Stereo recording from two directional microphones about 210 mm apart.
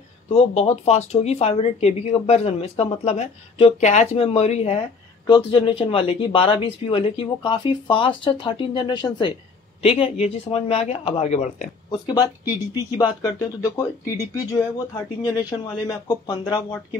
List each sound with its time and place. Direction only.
0.3 s speech: 30° left (ahead or behind)
11.9 s speech: 20° left (ahead or behind)